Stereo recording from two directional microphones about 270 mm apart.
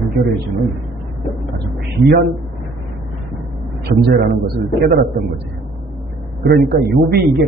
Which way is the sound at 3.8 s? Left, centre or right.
Right.